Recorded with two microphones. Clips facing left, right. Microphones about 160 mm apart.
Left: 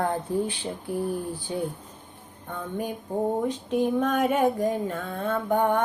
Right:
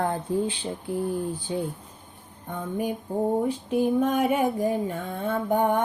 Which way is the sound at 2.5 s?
15° right (ahead or behind).